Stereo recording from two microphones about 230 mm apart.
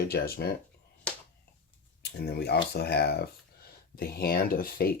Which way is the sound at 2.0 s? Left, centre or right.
Left.